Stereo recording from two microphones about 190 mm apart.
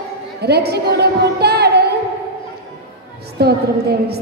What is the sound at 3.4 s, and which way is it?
Speech, 60° right (ahead or behind).